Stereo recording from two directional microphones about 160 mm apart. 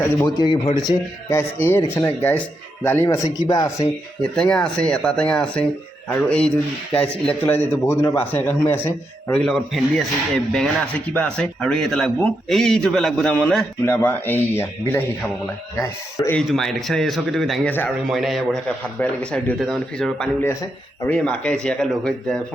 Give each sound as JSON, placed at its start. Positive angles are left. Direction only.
{"t": 0.0, "sound": "a man's voice", "side_deg": 15}
{"t": 0.4, "sound": "speech", "side_deg": 30}
{"t": 0.9, "sound": "a man's voice", "side_deg": 20}
{"t": 3.2, "sound": "speech", "side_deg": 25}
{"t": 4.4, "sound": "a man's voice", "side_deg": 5}
{"t": 16.5, "sound": "a man's voice", "side_deg": 0}
{"t": 17.7, "sound": "a man's voice", "side_deg": 10}
{"t": 18.0, "sound": "a man's voice", "side_deg": 0}